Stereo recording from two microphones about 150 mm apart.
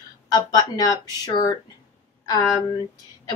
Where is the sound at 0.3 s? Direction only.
25° left (ahead or behind).